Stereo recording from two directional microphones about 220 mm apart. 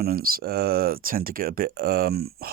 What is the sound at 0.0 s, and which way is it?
Speech, 40° right (ahead or behind).